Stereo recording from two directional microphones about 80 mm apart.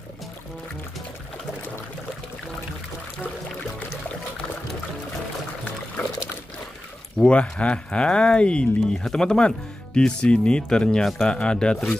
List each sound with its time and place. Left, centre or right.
7.2 s speech: centre